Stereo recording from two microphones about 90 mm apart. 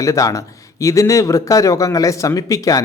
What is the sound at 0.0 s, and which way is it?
Speech, 35° left (ahead or behind).